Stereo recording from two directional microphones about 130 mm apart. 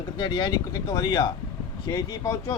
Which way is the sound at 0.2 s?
35° left (ahead or behind).